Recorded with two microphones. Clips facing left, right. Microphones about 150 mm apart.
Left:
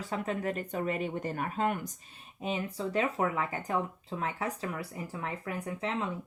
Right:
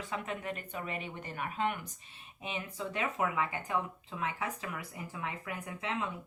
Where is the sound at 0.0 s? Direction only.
35° left (ahead or behind).